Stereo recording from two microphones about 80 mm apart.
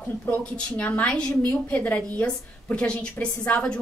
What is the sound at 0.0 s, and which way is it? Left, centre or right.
A woman's voice, centre.